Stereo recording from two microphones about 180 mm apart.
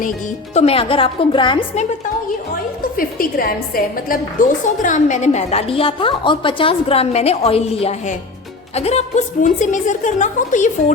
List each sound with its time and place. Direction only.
0.5 s a woman's voice: 35° left (ahead or behind)
2.9 s a woman's voice: 50° left (ahead or behind)